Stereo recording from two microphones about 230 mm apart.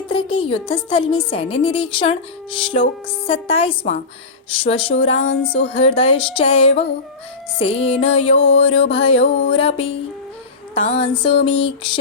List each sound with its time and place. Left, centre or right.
0.1 s a woman's voice: left